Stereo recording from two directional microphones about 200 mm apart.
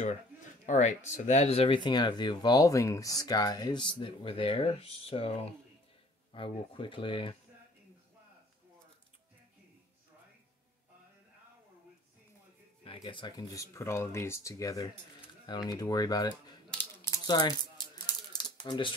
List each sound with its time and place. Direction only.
0.7 s speech: 35° left (ahead or behind)
12.8 s speech: 25° left (ahead or behind)
16.7 s rattle: 15° left (ahead or behind)